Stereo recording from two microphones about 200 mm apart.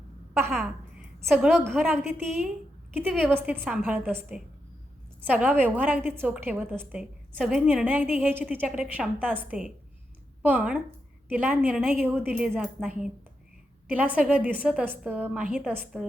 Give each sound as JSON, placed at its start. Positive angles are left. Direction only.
{"t": 0.5, "sound": "a woman's voice", "side_deg": 0}
{"t": 3.1, "sound": "a woman's voice", "side_deg": -10}